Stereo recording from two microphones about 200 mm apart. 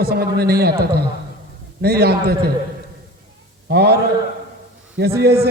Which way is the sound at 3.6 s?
55° right (ahead or behind).